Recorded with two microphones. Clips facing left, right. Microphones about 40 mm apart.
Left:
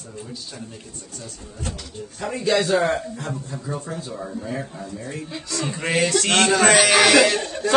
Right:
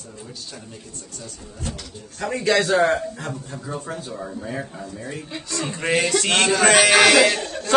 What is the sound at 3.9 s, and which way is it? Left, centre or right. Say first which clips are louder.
Speech: even; right.